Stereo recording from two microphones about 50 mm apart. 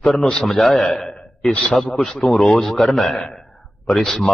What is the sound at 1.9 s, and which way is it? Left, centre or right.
A man's voice, centre.